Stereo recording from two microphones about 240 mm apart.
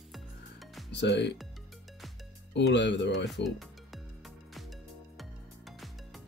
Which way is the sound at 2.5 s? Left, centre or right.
Left.